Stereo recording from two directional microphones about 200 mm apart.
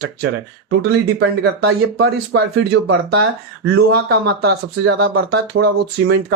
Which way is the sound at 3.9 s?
55° right (ahead or behind).